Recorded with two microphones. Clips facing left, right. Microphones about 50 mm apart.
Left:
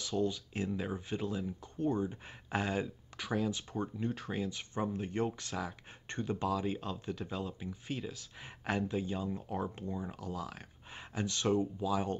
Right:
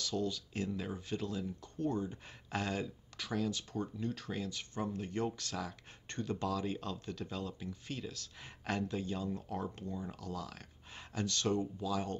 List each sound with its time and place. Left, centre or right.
0.0 s speech: centre